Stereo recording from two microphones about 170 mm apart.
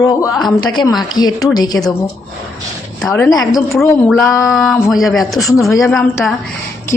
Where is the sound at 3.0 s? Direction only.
15° left (ahead or behind).